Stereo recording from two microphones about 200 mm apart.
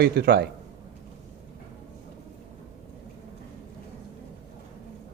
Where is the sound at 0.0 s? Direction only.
55° right (ahead or behind).